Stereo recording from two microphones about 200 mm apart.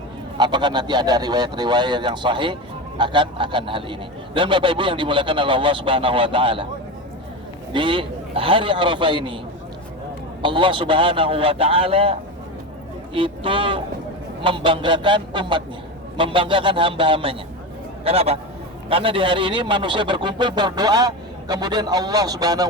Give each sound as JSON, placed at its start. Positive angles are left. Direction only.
{"t": 0.3, "sound": "a man's voice", "side_deg": -20}
{"t": 7.7, "sound": "a man's voice", "side_deg": -25}
{"t": 10.4, "sound": "a man's voice", "side_deg": -25}
{"t": 13.1, "sound": "a man's voice", "side_deg": -25}